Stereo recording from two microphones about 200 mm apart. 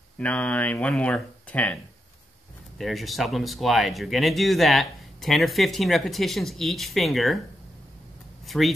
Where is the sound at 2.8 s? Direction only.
Centre (ahead or behind).